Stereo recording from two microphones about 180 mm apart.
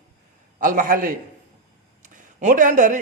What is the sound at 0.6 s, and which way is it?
Speech, 50° right (ahead or behind).